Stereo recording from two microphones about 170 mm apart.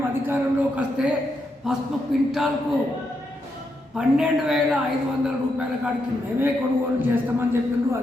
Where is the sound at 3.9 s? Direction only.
5° right (ahead or behind).